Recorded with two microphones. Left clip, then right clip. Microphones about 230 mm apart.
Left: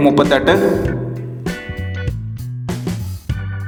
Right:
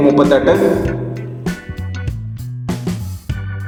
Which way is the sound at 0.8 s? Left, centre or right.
Centre.